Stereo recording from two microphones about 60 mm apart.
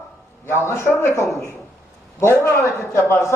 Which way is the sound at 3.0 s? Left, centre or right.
Left.